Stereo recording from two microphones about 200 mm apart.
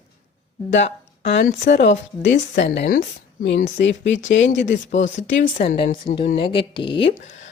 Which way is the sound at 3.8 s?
70° left (ahead or behind).